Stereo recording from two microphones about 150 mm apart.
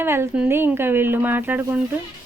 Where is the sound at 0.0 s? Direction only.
15° right (ahead or behind).